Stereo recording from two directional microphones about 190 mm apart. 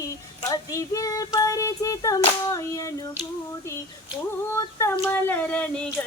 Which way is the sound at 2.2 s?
20° left (ahead or behind).